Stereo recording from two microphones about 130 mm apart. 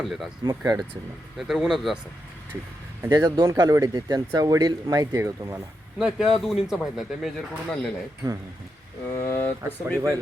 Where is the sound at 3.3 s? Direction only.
30° right (ahead or behind).